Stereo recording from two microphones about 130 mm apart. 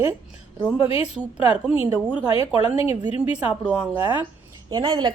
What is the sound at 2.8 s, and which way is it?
Speech, 50° left (ahead or behind).